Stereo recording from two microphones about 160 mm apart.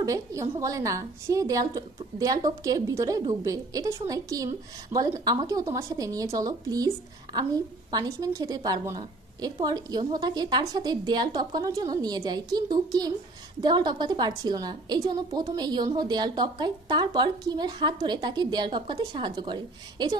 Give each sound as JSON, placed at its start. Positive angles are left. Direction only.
{"t": 0.0, "sound": "a woman's voice", "side_deg": -20}